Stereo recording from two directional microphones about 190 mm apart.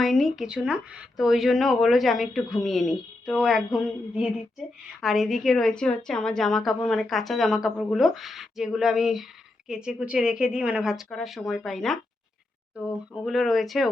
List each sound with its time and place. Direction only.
0.0 s speech: centre (ahead or behind)
13.2 s speech: centre (ahead or behind)